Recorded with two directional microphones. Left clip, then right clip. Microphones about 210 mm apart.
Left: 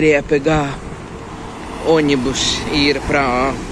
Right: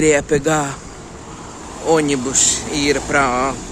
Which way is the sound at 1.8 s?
10° right (ahead or behind).